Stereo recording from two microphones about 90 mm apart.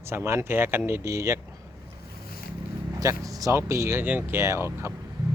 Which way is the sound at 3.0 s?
40° right (ahead or behind).